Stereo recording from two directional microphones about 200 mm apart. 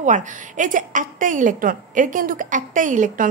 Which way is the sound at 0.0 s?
40° right (ahead or behind).